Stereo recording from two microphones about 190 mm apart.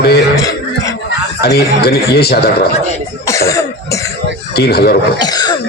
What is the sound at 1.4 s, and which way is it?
A man's voice, 55° left (ahead or behind).